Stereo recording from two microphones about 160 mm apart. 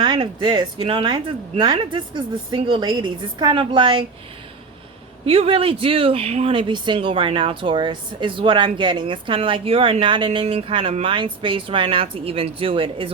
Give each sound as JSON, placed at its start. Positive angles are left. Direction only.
{"t": 0.0, "sound": "speech", "side_deg": -30}
{"t": 5.2, "sound": "speech", "side_deg": -35}